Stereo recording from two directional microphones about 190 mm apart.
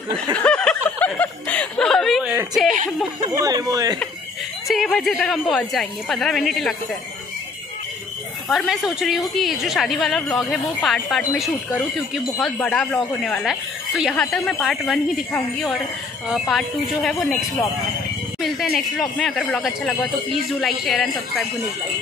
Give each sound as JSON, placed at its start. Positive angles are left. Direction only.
{"t": 0.3, "sound": "speech", "side_deg": 5}
{"t": 0.8, "sound": "snicker", "side_deg": 5}
{"t": 2.3, "sound": "speech", "side_deg": 0}
{"t": 3.3, "sound": "speech", "side_deg": -20}
{"t": 4.6, "sound": "speech", "side_deg": 0}
{"t": 8.5, "sound": "speech", "side_deg": 0}
{"t": 18.4, "sound": "speech", "side_deg": 0}